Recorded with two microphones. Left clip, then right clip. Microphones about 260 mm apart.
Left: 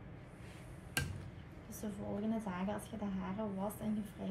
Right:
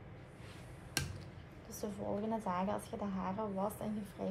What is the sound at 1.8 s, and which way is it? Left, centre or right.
A woman's voice, right.